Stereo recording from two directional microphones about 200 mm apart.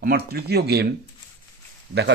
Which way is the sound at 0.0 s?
50° right (ahead or behind).